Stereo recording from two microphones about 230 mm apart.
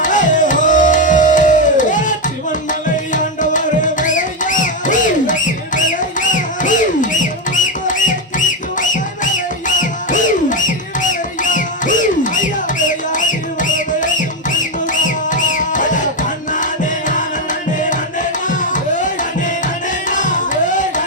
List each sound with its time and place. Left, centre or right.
0.0 s music: left
17.7 s music: left